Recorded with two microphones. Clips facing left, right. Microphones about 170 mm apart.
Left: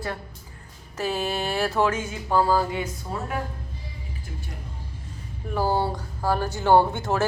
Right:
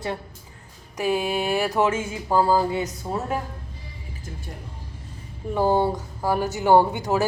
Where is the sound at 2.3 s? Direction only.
15° right (ahead or behind).